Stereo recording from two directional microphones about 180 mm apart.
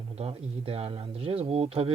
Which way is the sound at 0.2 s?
30° right (ahead or behind).